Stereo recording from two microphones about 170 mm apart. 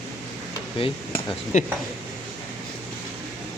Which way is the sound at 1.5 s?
45° left (ahead or behind).